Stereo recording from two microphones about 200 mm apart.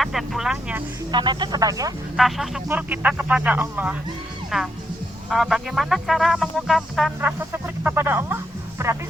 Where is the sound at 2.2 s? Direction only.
Centre (ahead or behind).